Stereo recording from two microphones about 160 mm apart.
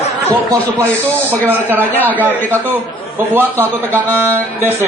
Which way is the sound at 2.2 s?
10° right (ahead or behind).